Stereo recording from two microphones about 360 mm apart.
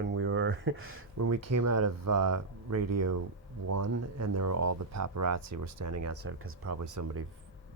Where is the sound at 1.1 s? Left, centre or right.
Right.